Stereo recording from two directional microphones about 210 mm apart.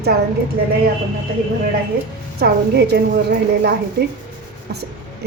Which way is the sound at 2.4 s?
50° right (ahead or behind).